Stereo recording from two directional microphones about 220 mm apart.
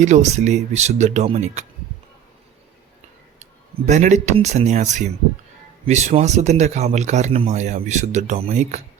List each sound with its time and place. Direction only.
0.0 s speech: 30° right (ahead or behind)
3.3 s speech: 30° right (ahead or behind)